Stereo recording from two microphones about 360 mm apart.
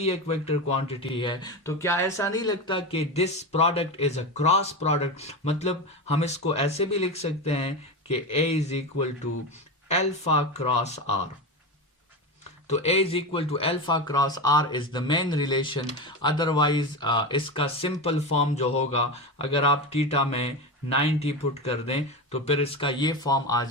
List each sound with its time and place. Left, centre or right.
0.0 s speech: centre
12.6 s speech: centre